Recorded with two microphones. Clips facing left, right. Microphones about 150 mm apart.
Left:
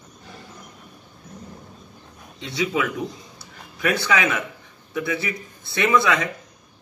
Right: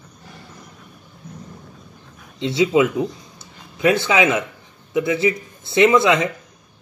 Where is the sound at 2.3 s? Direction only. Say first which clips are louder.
Right 8 dB; 25° right (ahead or behind).